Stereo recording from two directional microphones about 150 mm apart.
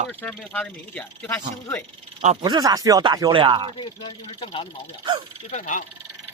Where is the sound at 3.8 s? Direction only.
35° left (ahead or behind).